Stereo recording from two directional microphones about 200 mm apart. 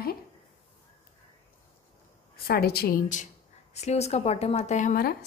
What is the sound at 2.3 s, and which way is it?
Speech, 50° left (ahead or behind).